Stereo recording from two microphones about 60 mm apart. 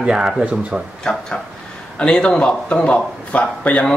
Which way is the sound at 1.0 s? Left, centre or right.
Centre.